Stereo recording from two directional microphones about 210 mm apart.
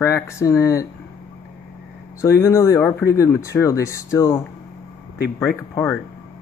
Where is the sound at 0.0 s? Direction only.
15° left (ahead or behind).